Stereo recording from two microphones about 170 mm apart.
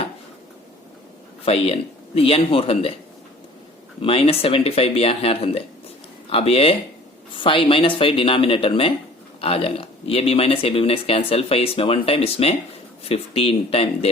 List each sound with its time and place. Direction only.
1.5 s speech: 35° left (ahead or behind)
4.0 s speech: 35° left (ahead or behind)